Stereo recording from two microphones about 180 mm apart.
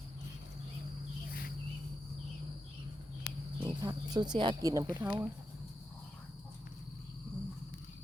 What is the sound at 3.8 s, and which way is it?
Speech, 25° right (ahead or behind).